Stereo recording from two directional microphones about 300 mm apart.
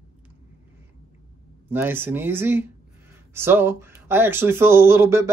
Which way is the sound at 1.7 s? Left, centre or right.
Centre.